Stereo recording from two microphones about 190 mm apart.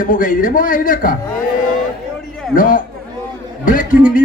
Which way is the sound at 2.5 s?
45° left (ahead or behind).